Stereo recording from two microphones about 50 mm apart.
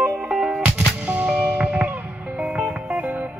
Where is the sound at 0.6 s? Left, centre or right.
Right.